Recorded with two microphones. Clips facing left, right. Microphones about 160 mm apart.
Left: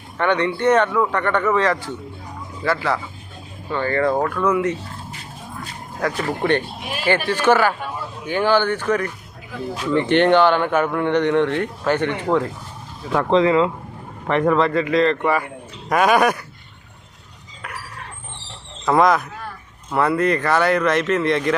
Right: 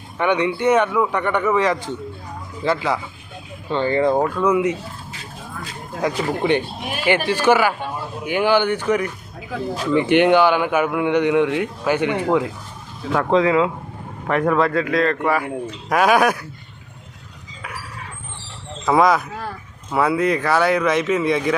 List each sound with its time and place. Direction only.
0.2 s a man's voice: 10° right (ahead or behind)
6.0 s a man's voice: 15° right (ahead or behind)
17.6 s dog: centre (ahead or behind)
18.9 s a man's voice: 5° right (ahead or behind)